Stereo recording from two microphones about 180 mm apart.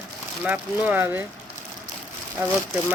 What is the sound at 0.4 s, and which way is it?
Speech, 10° right (ahead or behind).